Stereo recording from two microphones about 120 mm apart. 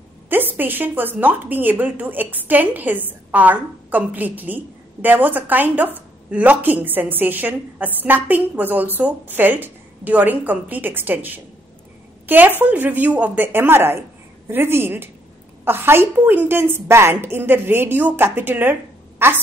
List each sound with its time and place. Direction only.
0.3 s a woman's voice: 15° right (ahead or behind)